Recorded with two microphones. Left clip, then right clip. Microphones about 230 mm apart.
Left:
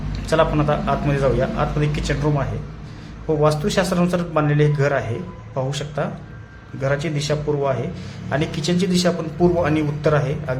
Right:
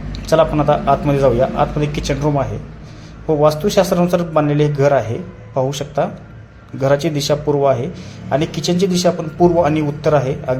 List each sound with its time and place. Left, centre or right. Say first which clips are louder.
0.1 s a man's voice: right 4 dB; centre